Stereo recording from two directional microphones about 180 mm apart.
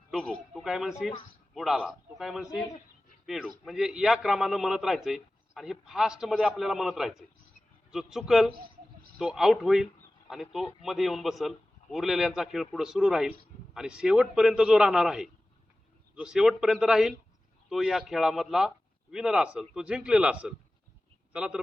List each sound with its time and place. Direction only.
0.1 s a man's voice: centre (ahead or behind)